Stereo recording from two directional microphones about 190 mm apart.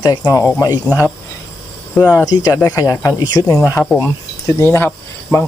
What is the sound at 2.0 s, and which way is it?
Speech, 15° left (ahead or behind).